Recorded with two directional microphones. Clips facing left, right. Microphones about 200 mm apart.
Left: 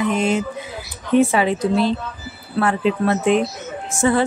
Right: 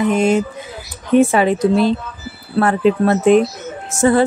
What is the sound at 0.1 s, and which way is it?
Speech, 45° right (ahead or behind).